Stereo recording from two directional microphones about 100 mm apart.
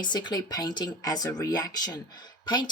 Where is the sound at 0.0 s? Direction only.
45° left (ahead or behind).